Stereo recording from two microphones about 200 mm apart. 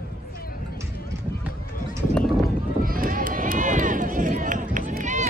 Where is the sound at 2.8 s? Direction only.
45° right (ahead or behind).